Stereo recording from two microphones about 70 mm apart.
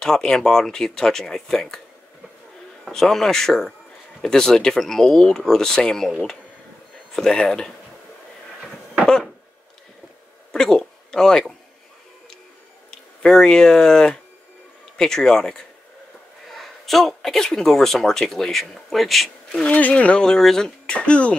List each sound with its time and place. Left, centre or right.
0.0 s speech: centre
2.9 s speech: centre
7.2 s speech: centre
10.5 s a sound: centre
12.9 s speech: centre
19.6 s speech: centre